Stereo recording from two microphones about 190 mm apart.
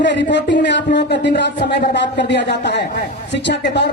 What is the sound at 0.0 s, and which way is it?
Speech, 65° left (ahead or behind).